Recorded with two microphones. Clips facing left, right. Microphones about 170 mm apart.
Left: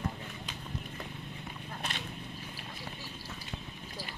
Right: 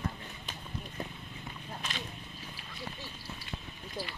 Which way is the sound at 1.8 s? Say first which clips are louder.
Left 1 dB; 60° left (ahead or behind).